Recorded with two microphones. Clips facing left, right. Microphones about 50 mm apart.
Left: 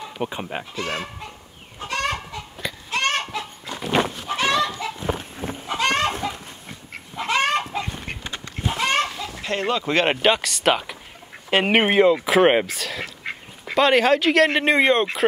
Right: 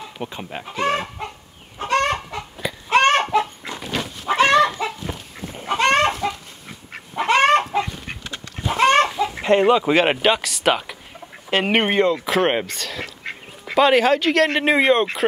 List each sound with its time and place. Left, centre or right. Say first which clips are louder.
0.2 s speech: left 3 dB; centre
0.7 s speech: right 8 dB; right
1.8 s chicken: right 6 dB; right
2.9 s a sound: right 8 dB; right
4.4 s chicken: right 6 dB; right
5.0 s goat: left 4 dB; left
5.8 s chicken: right 4 dB; right
7.2 s chicken: right 6 dB; right
7.9 s chicken: left 1 dB; left
8.7 s chicken: right 7 dB; right
9.3 s speech: right 8 dB; right; by 15.2 s centre